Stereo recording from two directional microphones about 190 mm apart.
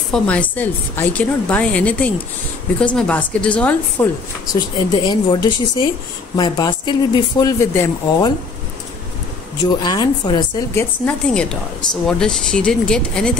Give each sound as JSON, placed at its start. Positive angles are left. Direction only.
{"t": 0.1, "sound": "a woman's voice", "side_deg": 5}
{"t": 4.5, "sound": "speech", "side_deg": 20}
{"t": 9.8, "sound": "speech", "side_deg": 20}
{"t": 10.7, "sound": "speech", "side_deg": 10}